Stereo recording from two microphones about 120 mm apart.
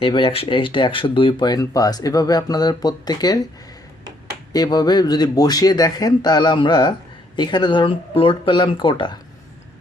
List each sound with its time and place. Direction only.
0.0 s speech: 50° left (ahead or behind); by 3.4 s 35° left (ahead or behind)
4.5 s speech: 35° left (ahead or behind)